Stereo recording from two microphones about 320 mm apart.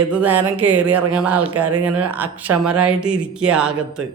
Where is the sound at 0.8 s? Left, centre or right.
Centre.